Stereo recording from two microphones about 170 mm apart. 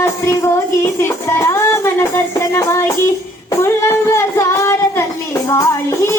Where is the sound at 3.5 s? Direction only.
15° left (ahead or behind).